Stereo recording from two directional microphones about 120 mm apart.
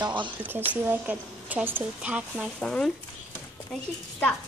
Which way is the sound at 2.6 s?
5° left (ahead or behind).